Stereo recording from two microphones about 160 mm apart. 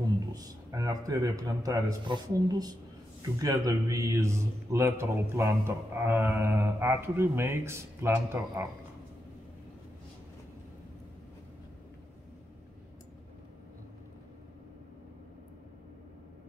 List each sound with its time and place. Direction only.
0.3 s a man's voice: 20° right (ahead or behind)